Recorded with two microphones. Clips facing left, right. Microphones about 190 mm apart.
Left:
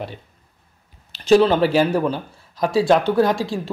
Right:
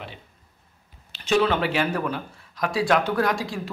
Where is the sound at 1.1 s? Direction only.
35° left (ahead or behind).